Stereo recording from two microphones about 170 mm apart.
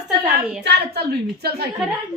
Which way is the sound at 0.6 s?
70° right (ahead or behind).